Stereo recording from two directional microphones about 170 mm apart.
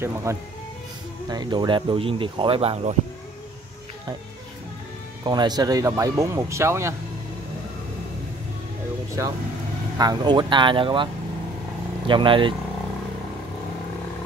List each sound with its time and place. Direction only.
0.0 s speech: 15° right (ahead or behind); by 3.0 s 40° right (ahead or behind)
5.2 s speech: 25° right (ahead or behind)
9.9 s speech: 25° right (ahead or behind)
12.1 s speech: 30° right (ahead or behind)